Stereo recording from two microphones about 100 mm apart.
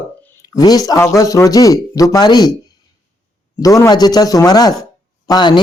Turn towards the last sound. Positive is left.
turn(degrees=50)  # may be behind; listen again after turning